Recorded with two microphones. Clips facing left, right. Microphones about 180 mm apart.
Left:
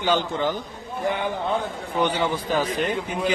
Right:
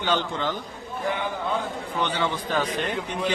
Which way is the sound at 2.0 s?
10° left (ahead or behind).